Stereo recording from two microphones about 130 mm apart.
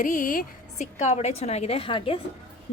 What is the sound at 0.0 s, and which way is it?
A woman's voice, 90° left.